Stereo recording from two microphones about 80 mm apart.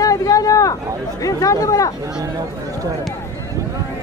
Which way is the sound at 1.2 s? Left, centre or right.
Left.